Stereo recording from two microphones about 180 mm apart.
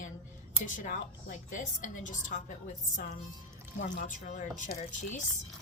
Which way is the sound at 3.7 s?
45° left (ahead or behind).